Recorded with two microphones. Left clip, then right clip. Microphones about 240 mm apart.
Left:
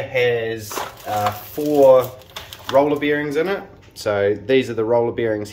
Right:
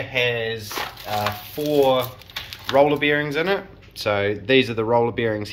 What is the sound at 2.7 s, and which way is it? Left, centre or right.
Speech, centre.